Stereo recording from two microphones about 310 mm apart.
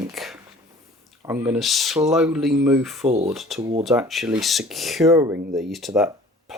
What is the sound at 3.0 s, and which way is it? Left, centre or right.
Speech, centre.